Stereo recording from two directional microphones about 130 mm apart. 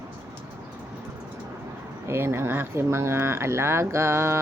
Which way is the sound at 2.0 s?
20° right (ahead or behind).